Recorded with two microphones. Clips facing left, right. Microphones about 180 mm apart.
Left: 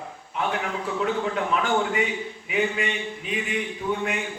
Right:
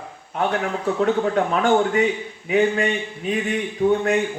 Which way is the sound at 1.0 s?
45° right (ahead or behind).